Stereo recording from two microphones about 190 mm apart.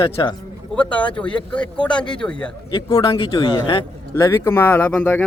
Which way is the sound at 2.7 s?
25° left (ahead or behind).